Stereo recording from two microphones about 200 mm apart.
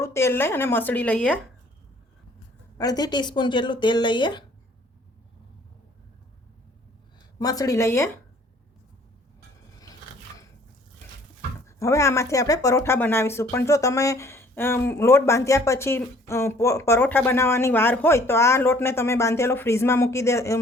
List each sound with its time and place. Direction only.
0.0 s speech: 15° left (ahead or behind)
2.7 s speech: 20° left (ahead or behind)
7.3 s speech: 20° left (ahead or behind)
11.8 s speech: 15° left (ahead or behind)